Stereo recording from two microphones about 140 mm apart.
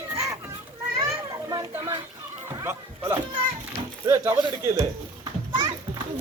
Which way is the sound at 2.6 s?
15° right (ahead or behind).